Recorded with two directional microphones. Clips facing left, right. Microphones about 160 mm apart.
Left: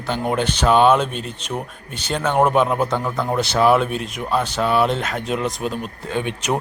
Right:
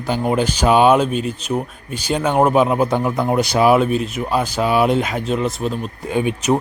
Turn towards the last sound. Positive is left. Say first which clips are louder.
# right 5 dB
turn(degrees=-5)  # may be behind; listen again after turning